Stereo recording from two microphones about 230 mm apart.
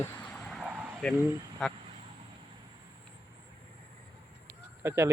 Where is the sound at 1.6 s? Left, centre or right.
Centre.